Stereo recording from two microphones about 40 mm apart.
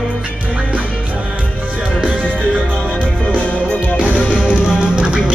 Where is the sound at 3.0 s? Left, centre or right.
Left.